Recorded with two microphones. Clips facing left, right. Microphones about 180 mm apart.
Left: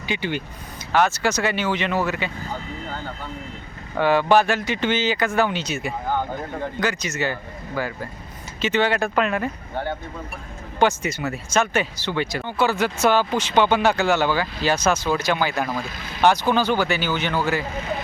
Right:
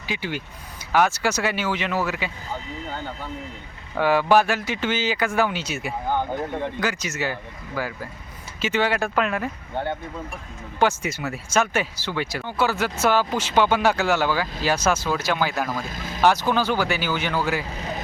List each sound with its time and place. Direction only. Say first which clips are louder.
0.0 s speech: left 3 dB; 5° right (ahead or behind)
3.9 s speech: left 1 dB; 5° right (ahead or behind)
10.8 s speech: left 2 dB; 5° right (ahead or behind)
15.8 s speech: right 1 dB; 45° right (ahead or behind)
16.2 s speech: left 1 dB; 5° right (ahead or behind)